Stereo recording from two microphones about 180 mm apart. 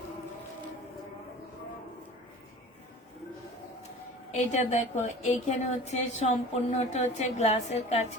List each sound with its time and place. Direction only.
4.3 s a woman's voice: 40° left (ahead or behind)